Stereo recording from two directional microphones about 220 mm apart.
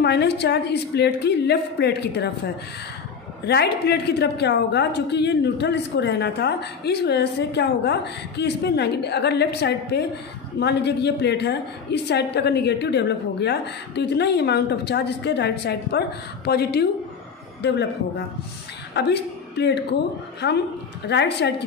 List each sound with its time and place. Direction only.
0.0 s a woman's voice: 50° left (ahead or behind)